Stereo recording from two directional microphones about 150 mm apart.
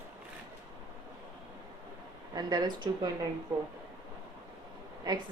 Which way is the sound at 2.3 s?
25° right (ahead or behind).